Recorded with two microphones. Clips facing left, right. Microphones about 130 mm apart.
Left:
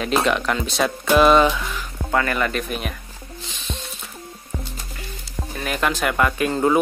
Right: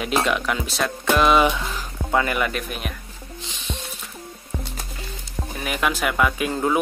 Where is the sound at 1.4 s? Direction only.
20° right (ahead or behind); by 2.9 s 5° right (ahead or behind).